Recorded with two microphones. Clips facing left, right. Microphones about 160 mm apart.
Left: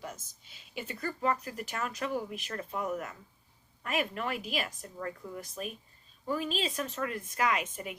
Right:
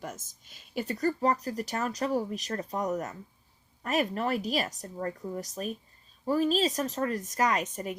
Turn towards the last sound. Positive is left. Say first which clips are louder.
# right 3 dB
turn(degrees=-40)  # may be behind; listen again after turning